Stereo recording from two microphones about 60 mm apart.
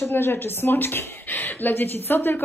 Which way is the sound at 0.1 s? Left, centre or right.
Left.